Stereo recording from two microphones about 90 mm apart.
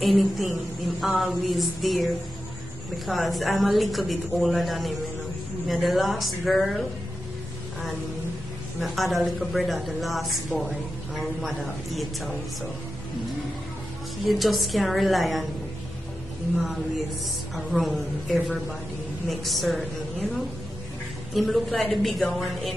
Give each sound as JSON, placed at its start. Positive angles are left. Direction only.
{"t": 0.0, "sound": "a woman's voice", "side_deg": 0}
{"t": 3.1, "sound": "a woman's voice", "side_deg": 0}
{"t": 8.7, "sound": "a woman's voice", "side_deg": 0}
{"t": 14.2, "sound": "a woman's voice", "side_deg": 0}
{"t": 16.6, "sound": "a woman's voice", "side_deg": 0}
{"t": 21.3, "sound": "a woman's voice", "side_deg": 0}